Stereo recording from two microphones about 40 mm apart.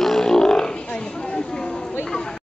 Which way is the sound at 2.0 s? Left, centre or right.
Centre.